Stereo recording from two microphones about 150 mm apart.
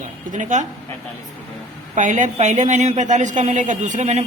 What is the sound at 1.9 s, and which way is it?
A man's voice, 55° right (ahead or behind).